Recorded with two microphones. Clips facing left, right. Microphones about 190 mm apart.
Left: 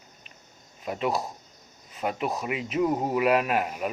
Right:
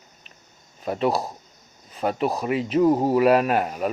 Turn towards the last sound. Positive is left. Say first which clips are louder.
# right 4 dB
turn(degrees=-40)  # may be behind; listen again after turning